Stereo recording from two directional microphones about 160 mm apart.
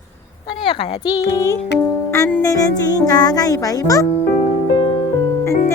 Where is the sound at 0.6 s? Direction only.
30° left (ahead or behind).